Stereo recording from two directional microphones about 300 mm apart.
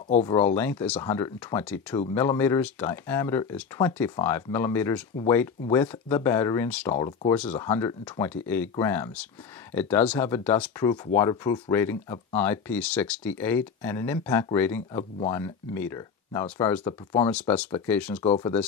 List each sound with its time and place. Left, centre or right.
0.1 s speech: centre
18.2 s speech: centre